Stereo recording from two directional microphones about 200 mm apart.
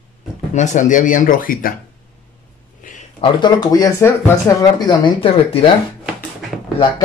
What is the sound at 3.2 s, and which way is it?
Speech, 20° left (ahead or behind).